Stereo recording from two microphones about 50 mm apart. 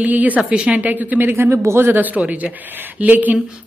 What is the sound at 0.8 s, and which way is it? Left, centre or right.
Speech, right.